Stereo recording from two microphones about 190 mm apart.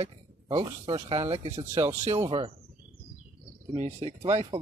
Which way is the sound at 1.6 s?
15° right (ahead or behind).